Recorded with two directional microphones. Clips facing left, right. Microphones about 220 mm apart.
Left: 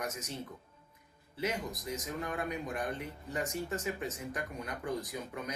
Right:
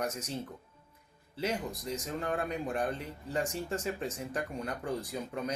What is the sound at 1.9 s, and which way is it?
Speech, 30° right (ahead or behind).